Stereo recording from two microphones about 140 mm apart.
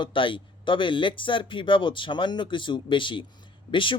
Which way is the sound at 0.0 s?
35° left (ahead or behind).